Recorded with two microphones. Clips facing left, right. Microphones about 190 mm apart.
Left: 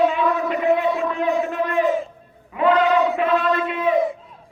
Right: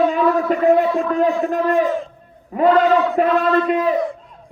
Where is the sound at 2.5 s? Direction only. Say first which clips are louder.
Right 3 dB; 40° right (ahead or behind).